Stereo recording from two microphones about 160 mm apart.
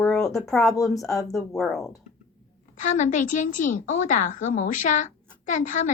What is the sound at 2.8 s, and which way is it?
A woman's voice, 55° left (ahead or behind).